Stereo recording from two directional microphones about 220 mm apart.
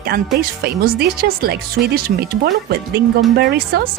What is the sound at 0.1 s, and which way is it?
Speech, 40° right (ahead or behind).